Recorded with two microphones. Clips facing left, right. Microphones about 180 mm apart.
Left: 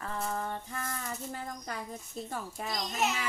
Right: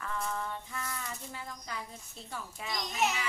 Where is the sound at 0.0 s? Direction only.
35° left (ahead or behind).